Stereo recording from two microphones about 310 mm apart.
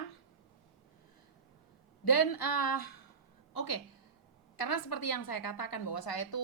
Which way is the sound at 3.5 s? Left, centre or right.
Left.